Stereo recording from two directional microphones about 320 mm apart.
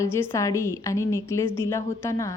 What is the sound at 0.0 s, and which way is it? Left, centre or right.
A woman's voice, centre.